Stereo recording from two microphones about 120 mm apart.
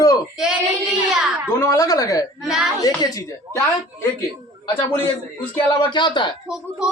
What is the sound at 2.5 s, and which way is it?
Child singing, 5° right (ahead or behind).